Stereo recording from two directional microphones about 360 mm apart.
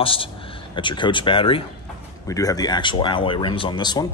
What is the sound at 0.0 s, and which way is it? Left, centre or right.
Speech, centre.